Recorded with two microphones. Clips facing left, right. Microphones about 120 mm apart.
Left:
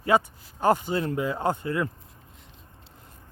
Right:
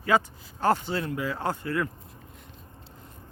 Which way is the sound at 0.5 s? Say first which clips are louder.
Left 2 dB; 10° left (ahead or behind).